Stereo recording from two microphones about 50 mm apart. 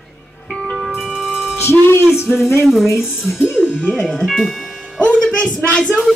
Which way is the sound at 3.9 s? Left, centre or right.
Centre.